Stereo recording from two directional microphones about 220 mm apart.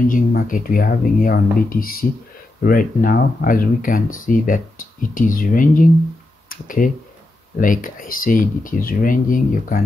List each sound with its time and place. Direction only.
0.1 s speech: 40° left (ahead or behind)